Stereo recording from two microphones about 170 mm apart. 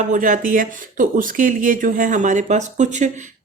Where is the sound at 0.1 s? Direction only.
50° right (ahead or behind).